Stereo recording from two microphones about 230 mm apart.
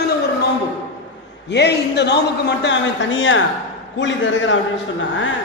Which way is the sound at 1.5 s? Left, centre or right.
Left.